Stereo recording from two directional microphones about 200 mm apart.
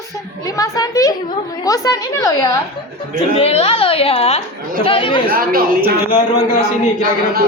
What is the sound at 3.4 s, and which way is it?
A woman's voice, 30° left (ahead or behind).